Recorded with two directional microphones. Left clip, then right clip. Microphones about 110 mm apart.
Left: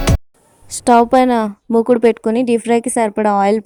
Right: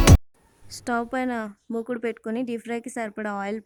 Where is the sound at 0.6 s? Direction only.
40° left (ahead or behind).